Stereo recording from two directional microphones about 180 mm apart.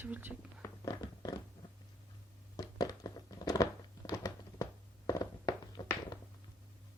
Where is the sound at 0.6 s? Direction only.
20° left (ahead or behind).